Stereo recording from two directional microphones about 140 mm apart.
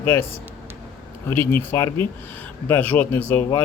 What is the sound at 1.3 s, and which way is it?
Speech, 15° left (ahead or behind).